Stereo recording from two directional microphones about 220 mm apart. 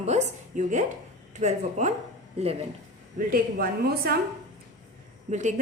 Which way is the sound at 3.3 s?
45° right (ahead or behind).